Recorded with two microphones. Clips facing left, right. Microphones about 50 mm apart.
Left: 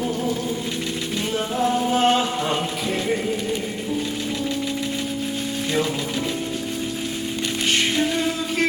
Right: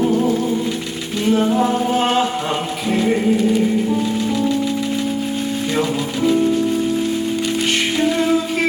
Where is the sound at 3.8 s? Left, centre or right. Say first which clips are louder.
Right 7 dB; right.